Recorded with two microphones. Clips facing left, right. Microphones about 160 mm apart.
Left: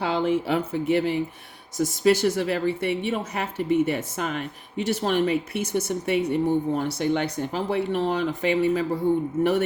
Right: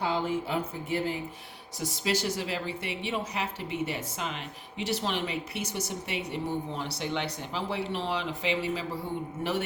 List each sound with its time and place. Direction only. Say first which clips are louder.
0.0 s speech: left 6 dB; 70° left (ahead or behind)
1.8 s a woman's voice: left 10 dB; 50° left (ahead or behind)